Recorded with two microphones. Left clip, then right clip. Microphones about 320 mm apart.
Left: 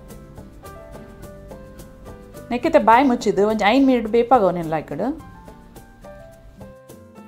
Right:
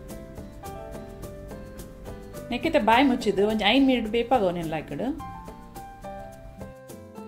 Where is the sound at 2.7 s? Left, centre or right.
Centre.